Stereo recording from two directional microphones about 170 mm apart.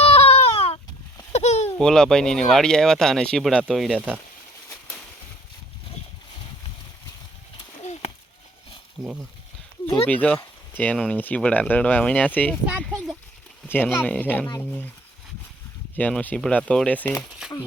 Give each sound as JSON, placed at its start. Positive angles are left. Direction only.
{"t": 0.0, "sound": "baby cry", "side_deg": 35}
{"t": 1.3, "sound": "a sound", "side_deg": 40}
{"t": 1.8, "sound": "speech", "side_deg": 5}
{"t": 7.8, "sound": "a sound", "side_deg": 40}
{"t": 9.0, "sound": "speech", "side_deg": -5}
{"t": 10.1, "sound": "speech", "side_deg": 10}
{"t": 12.8, "sound": "a sound", "side_deg": 5}
{"t": 13.7, "sound": "speech", "side_deg": 10}
{"t": 16.0, "sound": "speech", "side_deg": 10}